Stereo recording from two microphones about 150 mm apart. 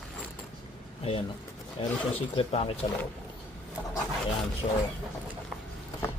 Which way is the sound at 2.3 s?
40° left (ahead or behind).